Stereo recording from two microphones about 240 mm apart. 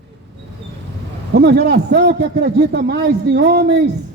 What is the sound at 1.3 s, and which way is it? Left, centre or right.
A man's voice, right.